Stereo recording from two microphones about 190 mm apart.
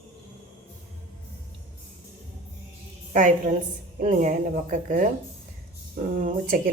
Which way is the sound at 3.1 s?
40° right (ahead or behind).